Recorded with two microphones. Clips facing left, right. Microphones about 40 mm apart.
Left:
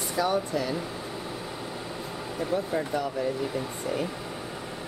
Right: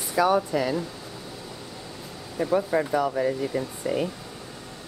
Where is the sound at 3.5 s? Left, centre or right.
Centre.